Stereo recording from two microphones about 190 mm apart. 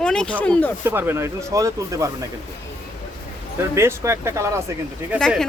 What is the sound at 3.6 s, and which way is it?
Speech, 15° right (ahead or behind).